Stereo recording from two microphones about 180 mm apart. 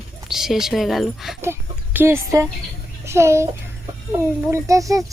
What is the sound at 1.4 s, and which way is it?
A child's voice, 10° right (ahead or behind).